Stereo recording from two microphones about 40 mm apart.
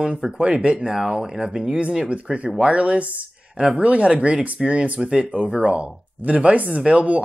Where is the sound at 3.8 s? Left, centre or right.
Right.